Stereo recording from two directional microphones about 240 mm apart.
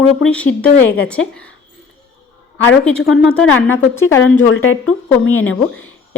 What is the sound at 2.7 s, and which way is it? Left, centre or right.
A woman's voice, centre.